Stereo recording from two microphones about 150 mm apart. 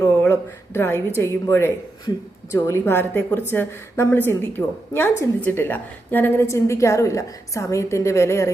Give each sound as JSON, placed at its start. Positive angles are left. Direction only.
{"t": 0.0, "sound": "a woman's voice", "side_deg": 15}